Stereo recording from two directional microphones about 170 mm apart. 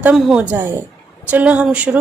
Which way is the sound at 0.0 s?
5° right (ahead or behind).